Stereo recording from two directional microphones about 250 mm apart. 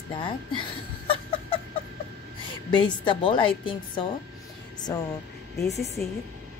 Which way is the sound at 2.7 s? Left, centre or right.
Centre.